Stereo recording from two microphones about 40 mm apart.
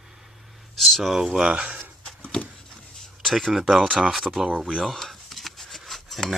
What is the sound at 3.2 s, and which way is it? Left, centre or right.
Speech, centre.